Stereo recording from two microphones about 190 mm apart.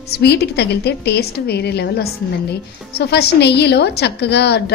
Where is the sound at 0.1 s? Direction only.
60° left (ahead or behind).